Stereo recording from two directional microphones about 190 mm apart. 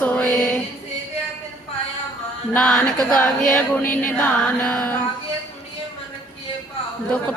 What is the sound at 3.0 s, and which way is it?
Female singing, 5° left (ahead or behind).